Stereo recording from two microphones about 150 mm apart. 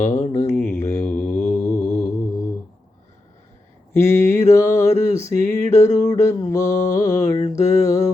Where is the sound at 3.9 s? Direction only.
15° left (ahead or behind).